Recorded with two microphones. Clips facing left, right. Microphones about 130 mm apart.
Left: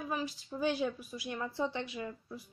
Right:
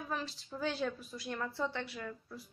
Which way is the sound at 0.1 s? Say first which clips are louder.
Left 2 dB; 15° left (ahead or behind).